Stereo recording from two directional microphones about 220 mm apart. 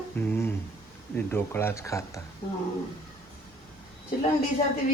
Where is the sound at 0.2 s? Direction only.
10° left (ahead or behind).